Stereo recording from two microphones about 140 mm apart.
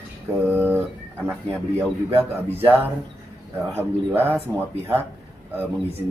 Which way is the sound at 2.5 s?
15° right (ahead or behind).